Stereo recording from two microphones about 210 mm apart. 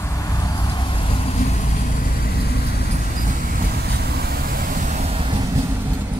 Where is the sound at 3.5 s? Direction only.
50° right (ahead or behind); by 5.6 s 25° right (ahead or behind).